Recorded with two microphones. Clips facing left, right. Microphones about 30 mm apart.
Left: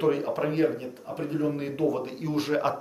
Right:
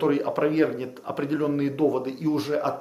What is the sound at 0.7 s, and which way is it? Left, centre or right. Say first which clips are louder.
Speech: right 4 dB; right.